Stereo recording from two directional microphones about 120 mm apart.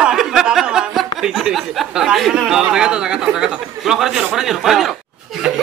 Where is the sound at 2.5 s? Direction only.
5° right (ahead or behind).